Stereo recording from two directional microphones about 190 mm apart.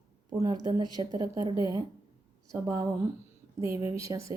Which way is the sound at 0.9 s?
20° right (ahead or behind).